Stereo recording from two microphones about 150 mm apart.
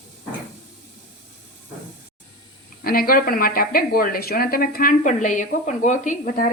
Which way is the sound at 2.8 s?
80° left.